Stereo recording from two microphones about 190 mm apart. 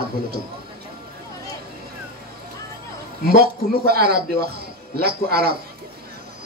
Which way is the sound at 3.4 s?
55° right (ahead or behind).